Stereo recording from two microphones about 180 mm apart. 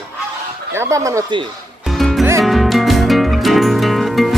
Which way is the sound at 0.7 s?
15° right (ahead or behind).